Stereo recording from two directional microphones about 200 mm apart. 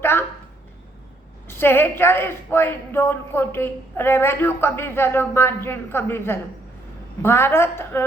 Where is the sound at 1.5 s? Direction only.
10° left (ahead or behind).